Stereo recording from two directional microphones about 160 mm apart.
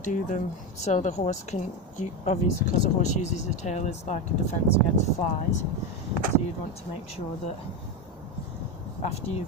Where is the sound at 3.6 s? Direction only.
45° left (ahead or behind).